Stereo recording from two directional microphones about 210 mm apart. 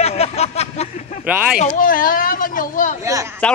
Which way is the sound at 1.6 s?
35° left (ahead or behind).